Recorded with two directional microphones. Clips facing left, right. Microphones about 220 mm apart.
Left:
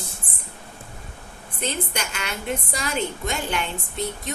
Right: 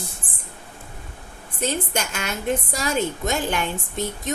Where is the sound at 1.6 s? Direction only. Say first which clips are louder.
Right 3 dB; 45° right (ahead or behind).